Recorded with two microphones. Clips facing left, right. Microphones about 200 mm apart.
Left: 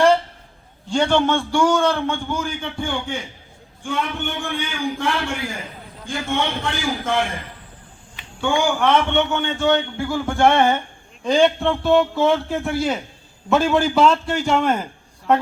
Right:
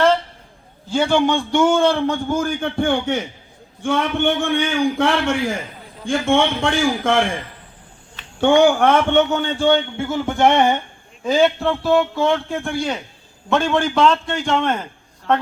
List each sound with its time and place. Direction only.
0.9 s a man's voice: 5° right (ahead or behind); by 3.2 s 60° right (ahead or behind)
3.8 s a man's voice: 85° right
8.4 s a man's voice: 65° right (ahead or behind); by 10.8 s 15° right (ahead or behind)
11.2 s a man's voice: 5° right (ahead or behind)